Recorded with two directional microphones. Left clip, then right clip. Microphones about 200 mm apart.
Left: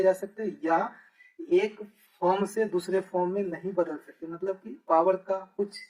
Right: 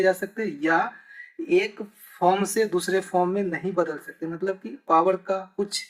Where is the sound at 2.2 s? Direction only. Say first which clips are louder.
Right 5 dB; 35° right (ahead or behind).